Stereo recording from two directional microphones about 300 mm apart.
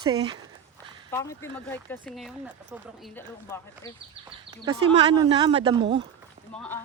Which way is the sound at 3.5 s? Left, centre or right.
Centre.